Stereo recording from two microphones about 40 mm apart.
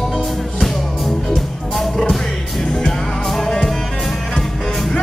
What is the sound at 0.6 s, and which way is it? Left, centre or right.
Music, centre.